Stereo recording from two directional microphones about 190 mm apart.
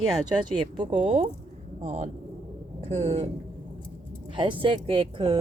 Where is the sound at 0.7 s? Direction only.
25° right (ahead or behind).